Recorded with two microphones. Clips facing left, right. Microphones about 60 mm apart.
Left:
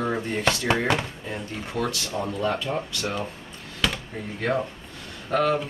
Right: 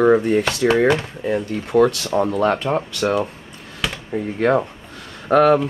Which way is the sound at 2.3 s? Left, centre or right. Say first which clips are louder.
Right 8 dB; right.